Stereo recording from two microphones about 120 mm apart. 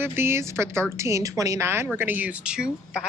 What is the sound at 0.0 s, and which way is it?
A woman's voice, 20° right (ahead or behind).